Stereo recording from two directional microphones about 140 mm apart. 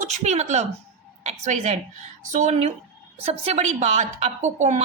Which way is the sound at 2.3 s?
55° right (ahead or behind).